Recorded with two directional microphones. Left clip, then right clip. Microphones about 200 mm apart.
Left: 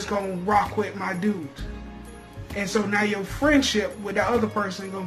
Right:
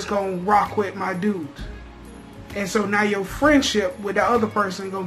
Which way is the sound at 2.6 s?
15° right (ahead or behind).